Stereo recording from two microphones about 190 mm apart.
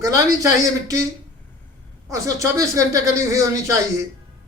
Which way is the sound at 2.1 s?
15° right (ahead or behind).